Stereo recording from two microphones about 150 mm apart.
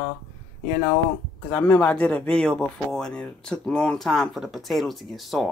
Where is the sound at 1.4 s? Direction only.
10° left (ahead or behind).